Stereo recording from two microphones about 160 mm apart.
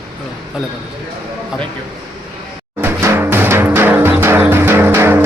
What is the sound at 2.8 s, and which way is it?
Music, 15° right (ahead or behind).